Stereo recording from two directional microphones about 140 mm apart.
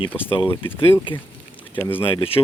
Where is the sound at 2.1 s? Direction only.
45° left (ahead or behind).